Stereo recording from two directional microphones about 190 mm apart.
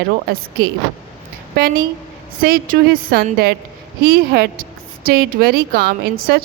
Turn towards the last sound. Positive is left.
turn(degrees=-55)  # may be behind; listen again after turning